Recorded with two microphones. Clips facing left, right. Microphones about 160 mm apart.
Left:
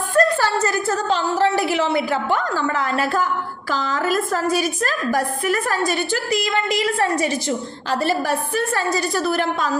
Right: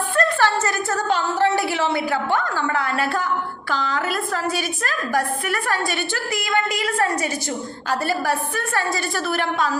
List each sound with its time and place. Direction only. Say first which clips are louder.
0.2 s a woman's voice: left 3 dB; 35° left (ahead or behind)
8.7 s a woman's voice: even; 40° left (ahead or behind)